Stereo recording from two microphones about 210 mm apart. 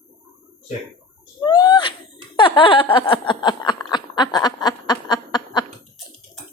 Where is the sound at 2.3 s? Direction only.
20° left (ahead or behind).